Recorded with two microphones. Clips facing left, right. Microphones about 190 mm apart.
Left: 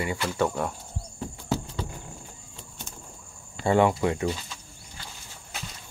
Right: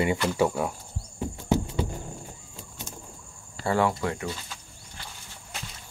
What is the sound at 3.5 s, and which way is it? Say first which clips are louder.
Speech: left 3 dB; 20° left (ahead or behind).